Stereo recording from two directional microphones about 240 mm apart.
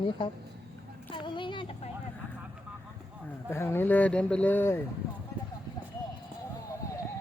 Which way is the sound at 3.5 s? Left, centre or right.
Centre.